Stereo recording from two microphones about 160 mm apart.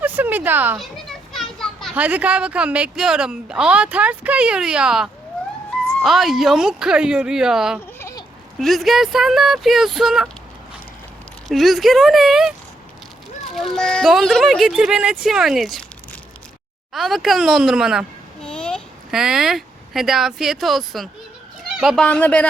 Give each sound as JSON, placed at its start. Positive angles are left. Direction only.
{"t": 0.0, "sound": "a sound", "side_deg": -10}
{"t": 0.8, "sound": "children playing", "side_deg": 0}
{"t": 2.0, "sound": "speech", "side_deg": -10}
{"t": 7.9, "sound": "a sound", "side_deg": 15}
{"t": 8.5, "sound": "speech", "side_deg": 0}
{"t": 11.4, "sound": "speech", "side_deg": 0}
{"t": 13.6, "sound": "speech", "side_deg": 0}
{"t": 16.9, "sound": "speech", "side_deg": 0}